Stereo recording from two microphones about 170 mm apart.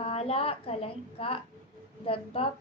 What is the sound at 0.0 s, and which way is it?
A woman's voice, 35° left (ahead or behind).